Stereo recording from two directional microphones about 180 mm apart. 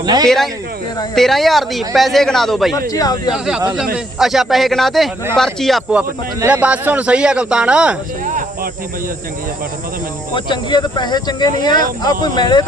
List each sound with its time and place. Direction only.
0.0 s speech: 20° right (ahead or behind)
0.3 s speech: centre (ahead or behind)
2.7 s speech: 20° left (ahead or behind)
3.3 s speech: 5° right (ahead or behind)
10.3 s speech: 25° left (ahead or behind)